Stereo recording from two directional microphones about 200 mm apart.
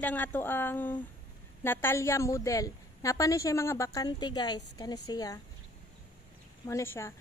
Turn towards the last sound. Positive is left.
turn(degrees=15)  # may be behind; listen again after turning